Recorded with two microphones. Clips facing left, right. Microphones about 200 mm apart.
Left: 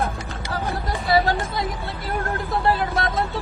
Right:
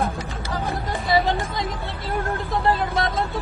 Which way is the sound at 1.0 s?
Centre (ahead or behind).